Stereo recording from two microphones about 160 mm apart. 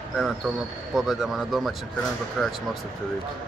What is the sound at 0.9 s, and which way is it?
Speech, centre (ahead or behind).